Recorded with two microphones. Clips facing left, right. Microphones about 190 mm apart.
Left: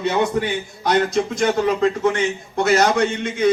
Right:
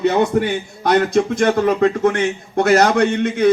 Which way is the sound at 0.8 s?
55° right (ahead or behind).